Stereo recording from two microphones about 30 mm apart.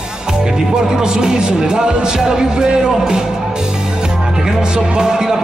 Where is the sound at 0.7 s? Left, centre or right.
Right.